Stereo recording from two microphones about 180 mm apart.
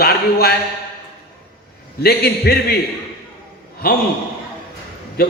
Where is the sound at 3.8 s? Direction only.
60° left (ahead or behind).